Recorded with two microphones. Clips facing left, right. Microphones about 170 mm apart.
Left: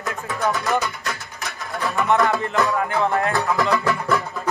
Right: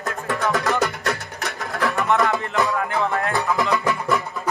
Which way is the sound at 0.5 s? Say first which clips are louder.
Right 2 dB; 80° right.